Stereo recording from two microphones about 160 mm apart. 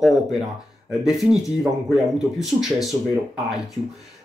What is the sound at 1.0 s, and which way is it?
Speech, centre (ahead or behind).